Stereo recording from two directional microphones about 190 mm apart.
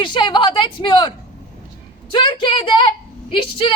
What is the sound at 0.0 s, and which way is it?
A woman's voice, 25° left (ahead or behind).